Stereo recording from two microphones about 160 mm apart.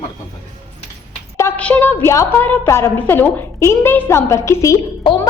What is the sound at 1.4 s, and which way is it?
A woman's voice, 10° left (ahead or behind).